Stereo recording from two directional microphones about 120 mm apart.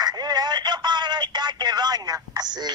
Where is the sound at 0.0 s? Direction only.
35° right (ahead or behind).